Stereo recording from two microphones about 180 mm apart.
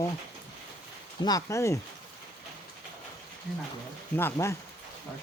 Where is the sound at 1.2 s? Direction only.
20° left (ahead or behind).